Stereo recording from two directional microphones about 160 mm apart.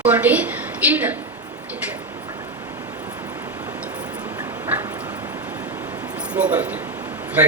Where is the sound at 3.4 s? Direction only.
10° right (ahead or behind).